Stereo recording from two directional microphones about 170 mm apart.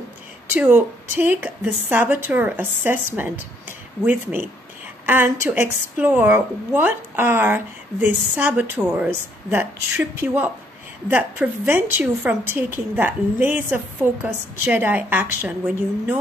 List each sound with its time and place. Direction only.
0.5 s a woman's voice: 10° right (ahead or behind)